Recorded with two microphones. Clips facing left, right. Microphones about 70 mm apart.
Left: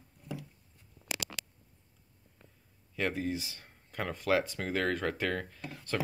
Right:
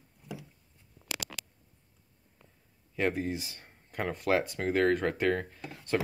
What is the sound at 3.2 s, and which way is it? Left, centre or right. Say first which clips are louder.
Speech: right 1 dB; right.